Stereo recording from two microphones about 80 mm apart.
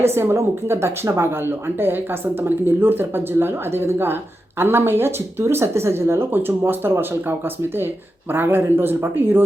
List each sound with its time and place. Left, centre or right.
0.0 s speech: right